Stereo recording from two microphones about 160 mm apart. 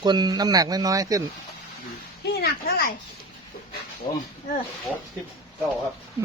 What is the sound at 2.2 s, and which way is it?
Speech, 85° left.